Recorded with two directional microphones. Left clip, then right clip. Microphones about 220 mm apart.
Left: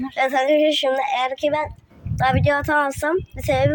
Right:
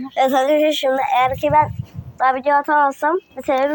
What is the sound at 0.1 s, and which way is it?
Speech, 5° right (ahead or behind).